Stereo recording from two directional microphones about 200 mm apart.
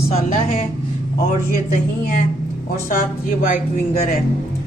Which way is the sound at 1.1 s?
45° left (ahead or behind).